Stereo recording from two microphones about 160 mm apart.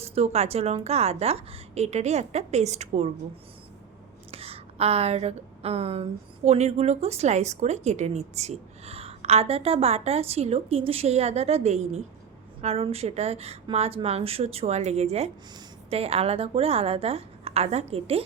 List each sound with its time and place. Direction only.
0.0 s a woman's voice: 40° right (ahead or behind)
4.3 s a woman's voice: 40° right (ahead or behind)